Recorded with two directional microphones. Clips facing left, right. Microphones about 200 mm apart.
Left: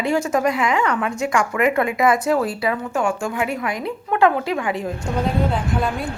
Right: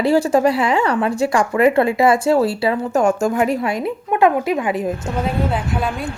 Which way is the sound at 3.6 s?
25° right (ahead or behind).